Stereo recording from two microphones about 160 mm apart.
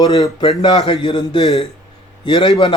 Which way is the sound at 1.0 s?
30° left (ahead or behind).